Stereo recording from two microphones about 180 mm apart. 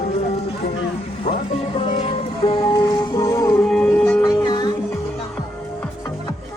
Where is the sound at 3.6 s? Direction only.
5° left (ahead or behind).